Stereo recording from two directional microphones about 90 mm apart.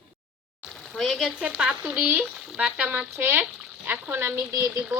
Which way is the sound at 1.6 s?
15° right (ahead or behind).